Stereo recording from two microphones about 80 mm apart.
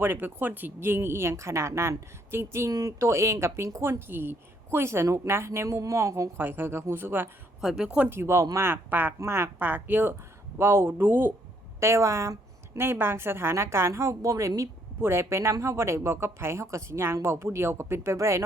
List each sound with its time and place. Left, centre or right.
0.0 s speech: right
7.6 s speech: centre
8.1 s speech: right
11.8 s speech: right